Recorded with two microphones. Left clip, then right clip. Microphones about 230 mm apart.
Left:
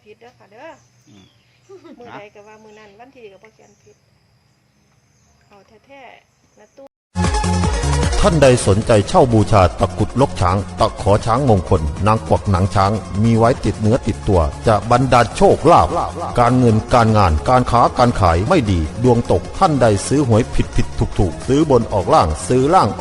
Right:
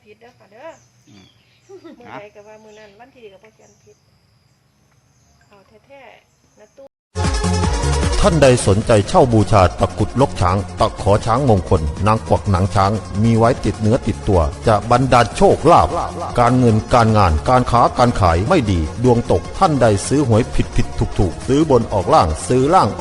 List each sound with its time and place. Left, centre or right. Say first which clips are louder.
0.2 s speech: right 2 dB; left
2.2 s speech: right 1 dB; left
5.9 s speech: left 2 dB; left
8.1 s speech: even; centre